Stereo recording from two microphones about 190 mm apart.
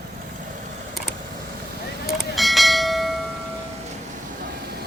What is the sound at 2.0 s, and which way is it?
Bell, centre (ahead or behind).